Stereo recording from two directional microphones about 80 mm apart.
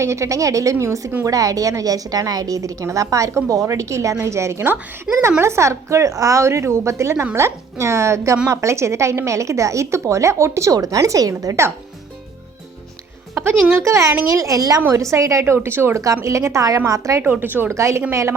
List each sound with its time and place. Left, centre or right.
0.0 s a woman's voice: right
5.1 s a woman's voice: centre
5.4 s speech: right
13.7 s a woman's voice: right
17.2 s speech: right
17.7 s speech: right